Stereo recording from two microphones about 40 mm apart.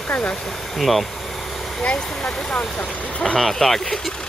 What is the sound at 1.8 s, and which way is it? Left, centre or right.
Speech, left.